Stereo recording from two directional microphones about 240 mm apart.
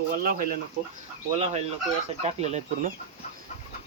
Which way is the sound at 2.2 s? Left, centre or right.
Right.